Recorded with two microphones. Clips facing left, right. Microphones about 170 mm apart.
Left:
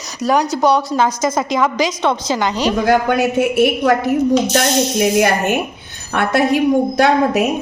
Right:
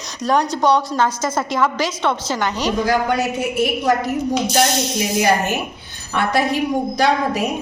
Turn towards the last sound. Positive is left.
turn(degrees=60)  # may be behind; listen again after turning